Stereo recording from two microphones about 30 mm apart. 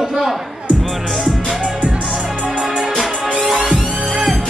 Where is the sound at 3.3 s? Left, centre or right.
Centre.